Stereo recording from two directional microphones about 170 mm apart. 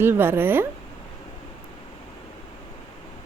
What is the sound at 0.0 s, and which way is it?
Speech, 15° right (ahead or behind).